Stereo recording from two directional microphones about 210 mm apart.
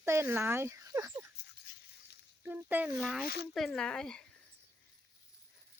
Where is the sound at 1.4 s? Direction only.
50° left (ahead or behind).